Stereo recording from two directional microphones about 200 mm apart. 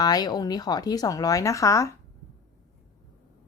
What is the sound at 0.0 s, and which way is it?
Speech, 20° left (ahead or behind).